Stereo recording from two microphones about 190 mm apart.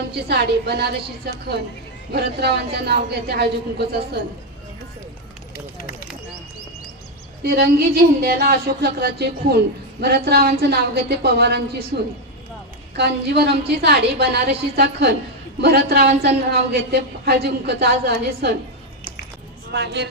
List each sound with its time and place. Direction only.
0.1 s speech: 60° right (ahead or behind)
7.4 s speech: 55° right (ahead or behind)
19.7 s speech: 60° right (ahead or behind)